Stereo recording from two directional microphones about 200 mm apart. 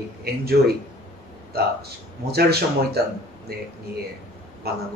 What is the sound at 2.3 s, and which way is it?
Speech, 50° right (ahead or behind).